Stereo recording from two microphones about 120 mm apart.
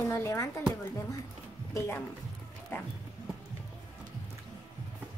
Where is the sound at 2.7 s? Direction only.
15° left (ahead or behind).